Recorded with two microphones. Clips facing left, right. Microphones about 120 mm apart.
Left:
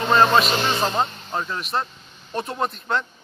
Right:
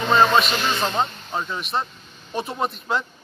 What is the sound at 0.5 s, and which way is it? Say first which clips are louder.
Speech: left 2 dB; 30° left (ahead or behind).